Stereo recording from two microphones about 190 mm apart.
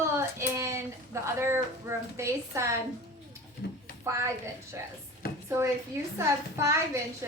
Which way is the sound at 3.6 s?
55° left (ahead or behind).